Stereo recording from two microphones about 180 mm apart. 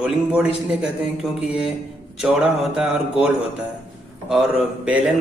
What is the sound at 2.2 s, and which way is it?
Speech, 5° right (ahead or behind).